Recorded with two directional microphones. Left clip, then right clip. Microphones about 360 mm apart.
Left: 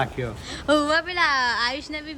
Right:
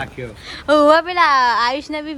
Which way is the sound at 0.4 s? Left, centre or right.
Centre.